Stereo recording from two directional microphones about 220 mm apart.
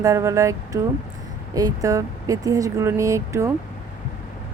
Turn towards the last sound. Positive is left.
turn(degrees=-15)  # may be behind; listen again after turning